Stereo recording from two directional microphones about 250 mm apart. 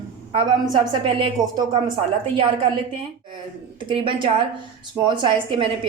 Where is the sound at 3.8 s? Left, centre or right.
Centre.